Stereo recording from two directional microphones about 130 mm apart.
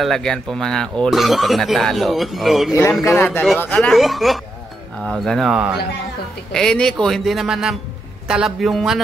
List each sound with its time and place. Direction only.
0.0 s speech: 5° left (ahead or behind)
3.2 s a man's voice: 15° left (ahead or behind); by 5.8 s 5° right (ahead or behind)
6.5 s speech: 5° left (ahead or behind)